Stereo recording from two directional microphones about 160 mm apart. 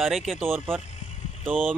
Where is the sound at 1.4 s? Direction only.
10° right (ahead or behind).